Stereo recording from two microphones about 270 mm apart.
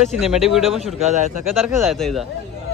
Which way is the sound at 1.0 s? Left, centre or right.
Right.